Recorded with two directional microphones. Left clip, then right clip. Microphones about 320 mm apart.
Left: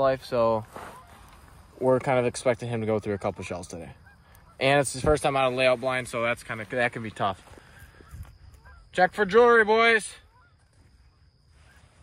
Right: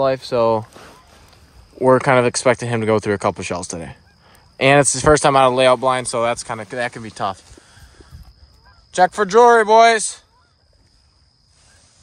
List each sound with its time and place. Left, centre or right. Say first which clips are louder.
0.0 s speech: right 7 dB; right
1.9 s speech: right 10 dB; right; by 7.3 s centre
8.9 s speech: right 7 dB; centre